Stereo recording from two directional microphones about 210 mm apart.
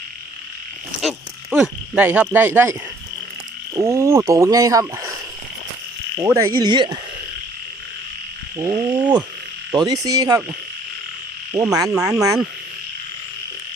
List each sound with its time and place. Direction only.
1.0 s speech: 5° right (ahead or behind)
3.8 s speech: 15° right (ahead or behind)
6.5 s speech: 20° right (ahead or behind)
8.5 s speech: 15° right (ahead or behind)
11.5 s speech: 15° right (ahead or behind)
11.9 s speech: 5° right (ahead or behind)
12.2 s speech: 15° right (ahead or behind)